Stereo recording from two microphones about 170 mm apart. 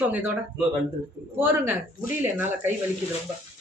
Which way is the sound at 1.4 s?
10° right (ahead or behind).